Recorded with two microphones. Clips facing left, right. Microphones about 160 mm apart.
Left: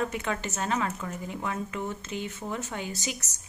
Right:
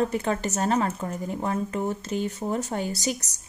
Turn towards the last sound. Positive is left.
turn(degrees=-35)  # may be behind; listen again after turning